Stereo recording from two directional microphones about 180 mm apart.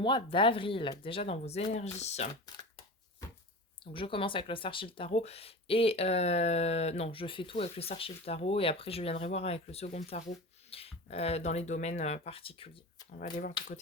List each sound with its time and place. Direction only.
0.0 s speech: 25° left (ahead or behind)
3.9 s speech: 30° left (ahead or behind)